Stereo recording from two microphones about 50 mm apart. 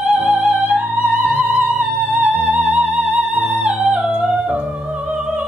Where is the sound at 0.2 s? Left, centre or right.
Right.